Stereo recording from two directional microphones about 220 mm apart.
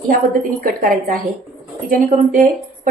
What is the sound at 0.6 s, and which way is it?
A woman's voice, 40° right (ahead or behind).